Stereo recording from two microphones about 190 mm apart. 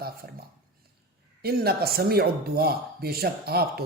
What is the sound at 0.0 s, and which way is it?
Speech, 55° right (ahead or behind).